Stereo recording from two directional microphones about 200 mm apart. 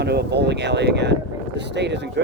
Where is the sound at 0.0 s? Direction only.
55° right (ahead or behind).